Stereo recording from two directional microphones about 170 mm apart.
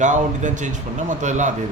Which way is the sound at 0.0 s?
45° right (ahead or behind).